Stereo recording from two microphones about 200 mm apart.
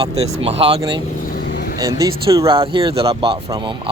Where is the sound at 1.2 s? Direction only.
50° left (ahead or behind).